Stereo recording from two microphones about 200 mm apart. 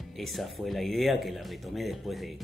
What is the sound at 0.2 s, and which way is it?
Speech, centre (ahead or behind).